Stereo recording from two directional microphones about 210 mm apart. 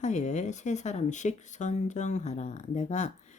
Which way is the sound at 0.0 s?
35° left (ahead or behind).